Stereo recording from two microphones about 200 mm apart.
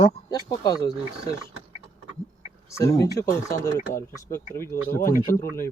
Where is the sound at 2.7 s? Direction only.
15° left (ahead or behind).